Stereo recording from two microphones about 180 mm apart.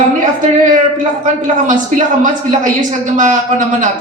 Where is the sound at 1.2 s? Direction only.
45° right (ahead or behind).